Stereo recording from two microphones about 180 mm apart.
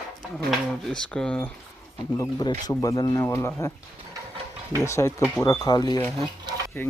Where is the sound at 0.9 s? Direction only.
5° left (ahead or behind).